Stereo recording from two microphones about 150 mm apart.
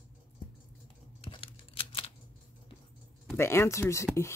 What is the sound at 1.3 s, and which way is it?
Scissors, 35° left (ahead or behind).